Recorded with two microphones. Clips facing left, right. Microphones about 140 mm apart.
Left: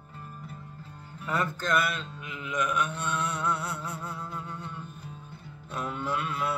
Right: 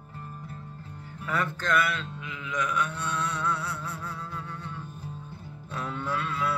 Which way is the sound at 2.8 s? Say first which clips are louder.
Even; 15° left (ahead or behind).